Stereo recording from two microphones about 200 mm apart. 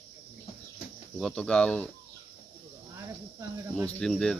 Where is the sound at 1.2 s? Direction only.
5° left (ahead or behind).